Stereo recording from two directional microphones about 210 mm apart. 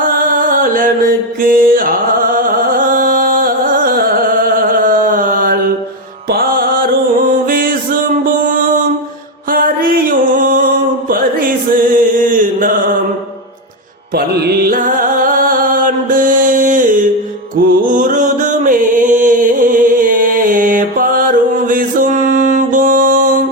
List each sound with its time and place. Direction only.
0.0 s mantra: 40° right (ahead or behind)
2.3 s music: 40° right (ahead or behind)
9.5 s music: 40° right (ahead or behind)
11.1 s music: 40° right (ahead or behind)
14.2 s music: 45° right (ahead or behind)